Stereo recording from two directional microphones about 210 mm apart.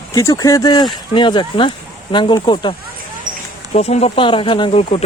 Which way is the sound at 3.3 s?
40° right (ahead or behind).